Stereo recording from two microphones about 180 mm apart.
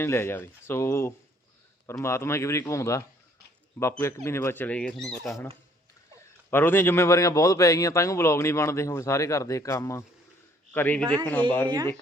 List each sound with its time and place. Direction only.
0.0 s a man's voice: 15° left (ahead or behind)
6.1 s a man's voice: 10° left (ahead or behind)
11.0 s a man's voice: 25° right (ahead or behind)